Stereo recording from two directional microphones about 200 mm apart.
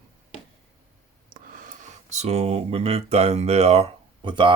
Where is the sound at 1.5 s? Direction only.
40° right (ahead or behind).